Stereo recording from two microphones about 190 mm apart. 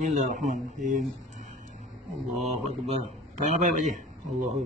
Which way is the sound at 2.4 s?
35° right (ahead or behind).